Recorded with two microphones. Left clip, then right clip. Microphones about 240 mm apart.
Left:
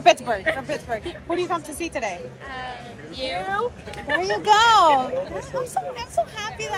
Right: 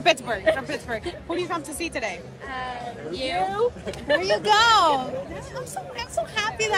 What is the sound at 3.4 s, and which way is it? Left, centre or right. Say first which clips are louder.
Speech: right 4 dB; right.